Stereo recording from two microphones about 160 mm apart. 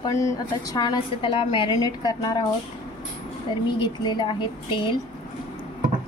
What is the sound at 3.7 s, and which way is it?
A woman's voice, 30° left (ahead or behind).